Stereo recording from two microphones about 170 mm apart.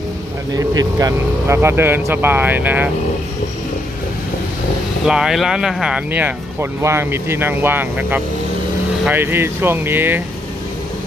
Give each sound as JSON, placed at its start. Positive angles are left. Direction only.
{"t": 0.6, "sound": "speech", "side_deg": -20}
{"t": 5.0, "sound": "speech", "side_deg": -5}